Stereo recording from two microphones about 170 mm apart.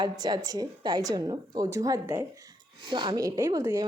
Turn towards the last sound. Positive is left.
turn(degrees=-20)  # may be behind; listen again after turning